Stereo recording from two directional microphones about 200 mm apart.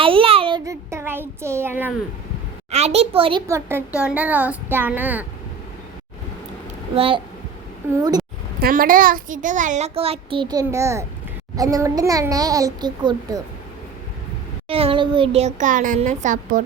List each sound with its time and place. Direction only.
0.0 s a sound: 25° right (ahead or behind); by 1.9 s 10° right (ahead or behind)
2.6 s a child's voice: 30° right (ahead or behind)
3.4 s a child's voice: 15° right (ahead or behind)
6.9 s speech: 30° right (ahead or behind)
7.8 s a child's voice: 10° right (ahead or behind)
8.5 s a child's voice: 45° right (ahead or behind); by 13.4 s 20° right (ahead or behind)
14.7 s a child's voice: 30° right (ahead or behind)